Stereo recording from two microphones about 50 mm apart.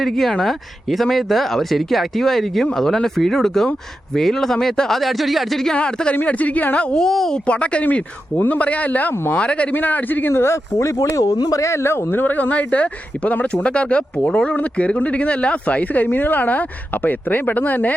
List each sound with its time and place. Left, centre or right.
0.0 s speech: centre
5.7 s speech: centre
6.2 s speech: left
6.9 s speech: centre
7.3 s speech: left
9.7 s speech: left
10.3 s speech: left
11.6 s speech: left